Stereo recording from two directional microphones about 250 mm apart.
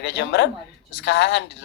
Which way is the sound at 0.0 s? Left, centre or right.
Left.